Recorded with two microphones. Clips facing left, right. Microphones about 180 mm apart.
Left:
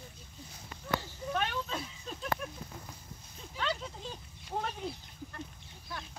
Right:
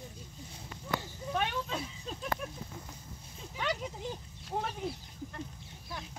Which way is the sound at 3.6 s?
15° right (ahead or behind).